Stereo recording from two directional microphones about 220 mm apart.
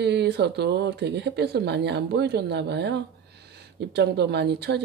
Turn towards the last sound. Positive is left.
turn(degrees=-50)  # may be behind; listen again after turning